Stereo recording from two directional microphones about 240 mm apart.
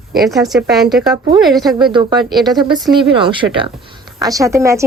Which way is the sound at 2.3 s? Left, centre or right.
Centre.